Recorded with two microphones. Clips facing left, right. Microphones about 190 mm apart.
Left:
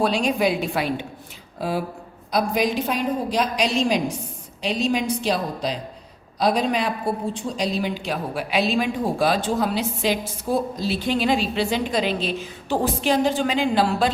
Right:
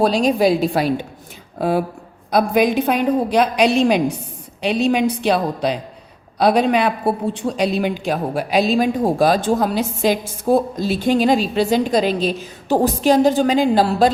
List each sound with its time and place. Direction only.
0.0 s a woman's voice: 40° right (ahead or behind)
1.5 s a woman's voice: 55° right (ahead or behind)